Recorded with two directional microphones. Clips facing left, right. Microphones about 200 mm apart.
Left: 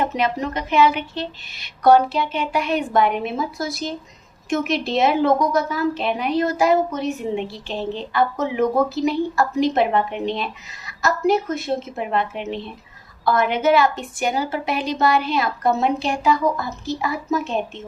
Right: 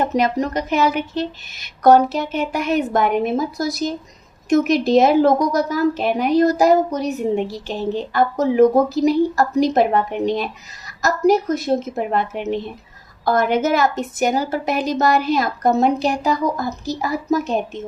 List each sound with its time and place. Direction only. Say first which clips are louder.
0.0 s a woman's voice: right 3 dB; 40° right (ahead or behind)